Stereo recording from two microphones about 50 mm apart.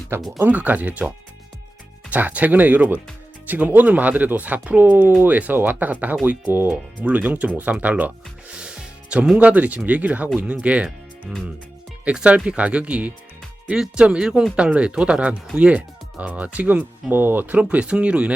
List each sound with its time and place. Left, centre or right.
0.1 s speech: right
0.4 s speech: right
4.8 s speech: right
8.5 s music: centre
9.4 s speech: right
12.0 s speech: right
17.6 s speech: right